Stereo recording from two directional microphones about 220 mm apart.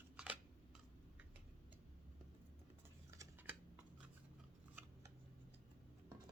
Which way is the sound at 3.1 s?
10° right (ahead or behind).